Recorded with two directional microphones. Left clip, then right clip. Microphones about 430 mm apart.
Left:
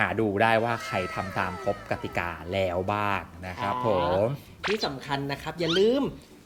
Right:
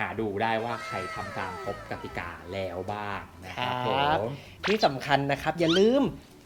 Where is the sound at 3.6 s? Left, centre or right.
Right.